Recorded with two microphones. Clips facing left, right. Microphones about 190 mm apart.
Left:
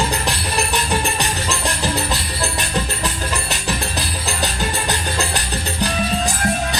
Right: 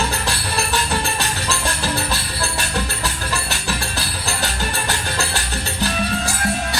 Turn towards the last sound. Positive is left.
turn(degrees=20)  # may be behind; listen again after turning